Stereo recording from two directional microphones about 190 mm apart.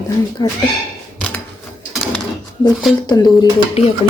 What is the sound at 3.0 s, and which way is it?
Speech, 20° left (ahead or behind).